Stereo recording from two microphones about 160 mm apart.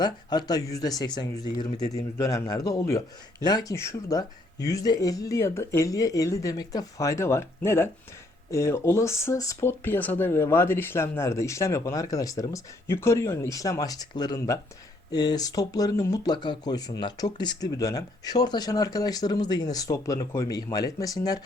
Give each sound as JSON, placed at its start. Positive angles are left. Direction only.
{"t": 0.0, "sound": "speech", "side_deg": 25}